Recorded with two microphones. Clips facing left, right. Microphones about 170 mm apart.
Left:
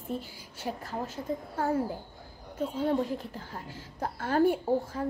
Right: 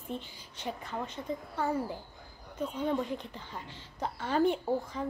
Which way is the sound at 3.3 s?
45° left (ahead or behind).